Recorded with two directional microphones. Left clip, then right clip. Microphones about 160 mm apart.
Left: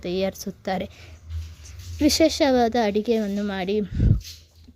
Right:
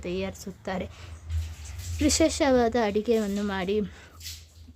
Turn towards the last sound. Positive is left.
turn(degrees=15)  # may be behind; listen again after turning